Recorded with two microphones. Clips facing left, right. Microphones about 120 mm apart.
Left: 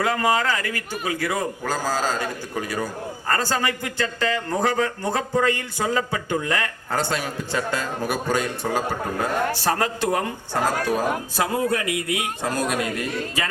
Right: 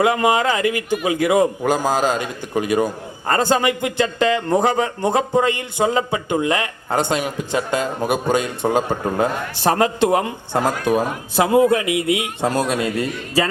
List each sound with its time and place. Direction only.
0.0 s a man's voice: 20° right (ahead or behind)